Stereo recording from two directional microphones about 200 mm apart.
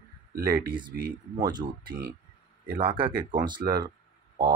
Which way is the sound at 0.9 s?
45° right (ahead or behind).